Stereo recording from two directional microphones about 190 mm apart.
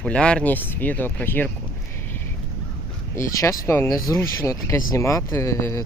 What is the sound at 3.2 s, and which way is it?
Speech, 15° left (ahead or behind).